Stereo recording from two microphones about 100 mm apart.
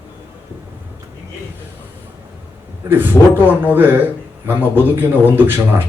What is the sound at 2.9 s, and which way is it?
Speech, 20° right (ahead or behind).